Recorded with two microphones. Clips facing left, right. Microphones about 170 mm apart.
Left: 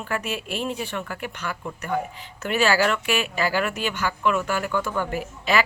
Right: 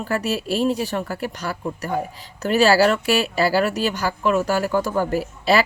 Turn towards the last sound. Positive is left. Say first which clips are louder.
# right 5 dB
turn(degrees=-35)  # may be behind; listen again after turning